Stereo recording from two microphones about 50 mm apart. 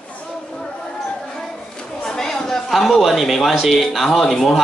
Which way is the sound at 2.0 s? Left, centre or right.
Centre.